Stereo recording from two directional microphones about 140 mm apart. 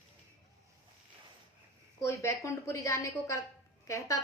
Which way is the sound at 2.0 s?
20° left (ahead or behind).